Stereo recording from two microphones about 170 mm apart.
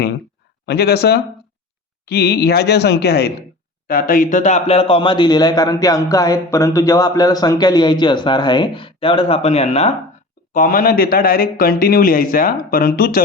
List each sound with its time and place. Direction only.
0.6 s speech: 70° left (ahead or behind)
3.8 s speech: 55° left (ahead or behind); by 9.9 s 35° left (ahead or behind)
10.5 s a man's voice: 55° left (ahead or behind)